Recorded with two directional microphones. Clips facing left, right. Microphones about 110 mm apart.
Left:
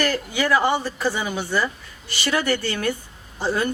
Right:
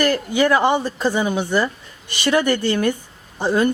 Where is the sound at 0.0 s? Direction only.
15° right (ahead or behind).